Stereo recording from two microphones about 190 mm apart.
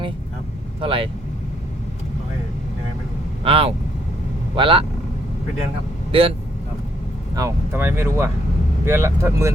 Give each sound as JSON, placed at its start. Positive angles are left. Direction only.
{"t": 0.8, "sound": "speech", "side_deg": -30}
{"t": 3.4, "sound": "speech", "side_deg": -30}
{"t": 6.1, "sound": "speech", "side_deg": -30}
{"t": 7.3, "sound": "speech", "side_deg": -15}